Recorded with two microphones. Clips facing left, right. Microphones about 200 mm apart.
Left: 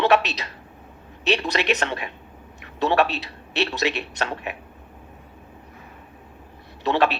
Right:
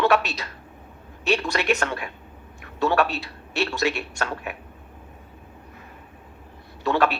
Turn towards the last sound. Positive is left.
turn(degrees=20)  # may be behind; listen again after turning